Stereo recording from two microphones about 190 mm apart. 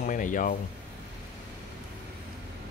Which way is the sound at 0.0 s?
45° left (ahead or behind).